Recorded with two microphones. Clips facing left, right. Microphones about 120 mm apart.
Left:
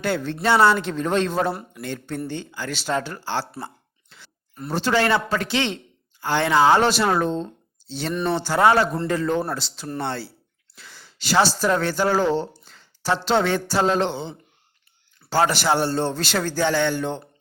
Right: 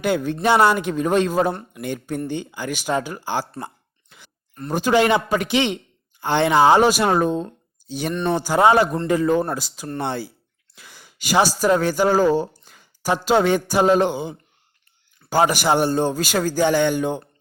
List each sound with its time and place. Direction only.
0.0 s a man's voice: 15° right (ahead or behind)
4.1 s a sound: 15° right (ahead or behind)
4.7 s a man's voice: 15° right (ahead or behind)